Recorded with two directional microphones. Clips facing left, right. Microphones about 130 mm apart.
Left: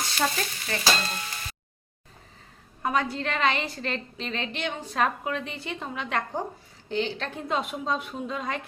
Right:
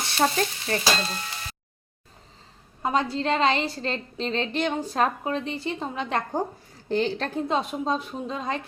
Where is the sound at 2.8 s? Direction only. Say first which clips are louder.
Right 2 dB; 25° right (ahead or behind).